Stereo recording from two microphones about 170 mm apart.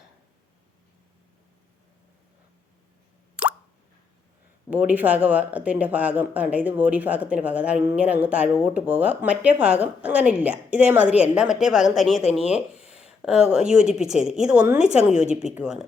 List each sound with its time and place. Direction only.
3.4 s plop: 5° right (ahead or behind)
4.7 s speech: 10° right (ahead or behind)
12.4 s speech: 40° left (ahead or behind)
12.9 s a woman's voice: 5° right (ahead or behind)